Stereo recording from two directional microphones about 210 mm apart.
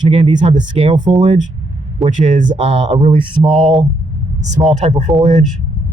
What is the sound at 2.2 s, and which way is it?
Speech, 35° right (ahead or behind).